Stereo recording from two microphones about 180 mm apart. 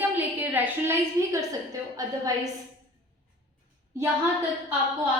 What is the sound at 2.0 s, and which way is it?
Speech, 20° right (ahead or behind).